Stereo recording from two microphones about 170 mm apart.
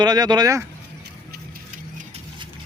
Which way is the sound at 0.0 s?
25° right (ahead or behind).